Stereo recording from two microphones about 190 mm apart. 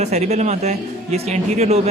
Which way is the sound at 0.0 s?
35° right (ahead or behind).